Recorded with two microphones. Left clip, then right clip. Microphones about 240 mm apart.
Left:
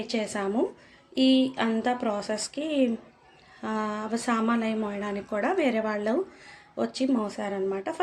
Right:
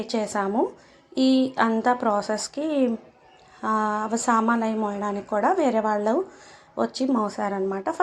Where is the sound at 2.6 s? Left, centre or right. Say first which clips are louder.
Right 2 dB; right.